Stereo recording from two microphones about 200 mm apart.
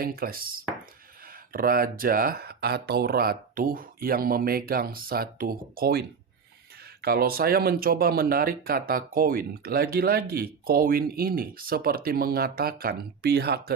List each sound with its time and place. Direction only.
0.0 s speech: 45° right (ahead or behind)